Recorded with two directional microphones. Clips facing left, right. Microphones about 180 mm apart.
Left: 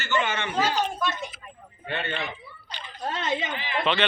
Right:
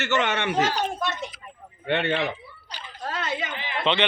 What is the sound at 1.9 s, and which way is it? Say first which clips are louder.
Speech: right 7 dB; 75° right (ahead or behind).